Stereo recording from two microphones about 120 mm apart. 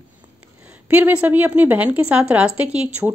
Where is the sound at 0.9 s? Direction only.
15° right (ahead or behind).